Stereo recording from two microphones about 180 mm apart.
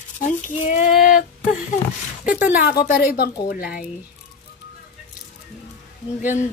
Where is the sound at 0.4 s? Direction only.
45° left (ahead or behind).